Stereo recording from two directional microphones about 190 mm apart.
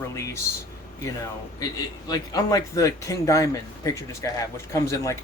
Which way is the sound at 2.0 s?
20° left (ahead or behind).